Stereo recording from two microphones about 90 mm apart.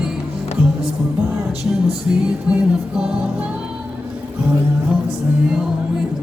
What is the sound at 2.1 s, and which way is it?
Music, 20° right (ahead or behind).